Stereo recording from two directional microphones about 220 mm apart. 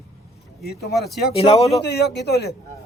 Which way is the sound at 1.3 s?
25° left (ahead or behind).